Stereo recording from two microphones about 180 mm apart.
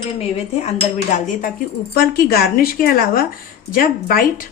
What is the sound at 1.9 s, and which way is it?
A woman's voice, 55° left (ahead or behind).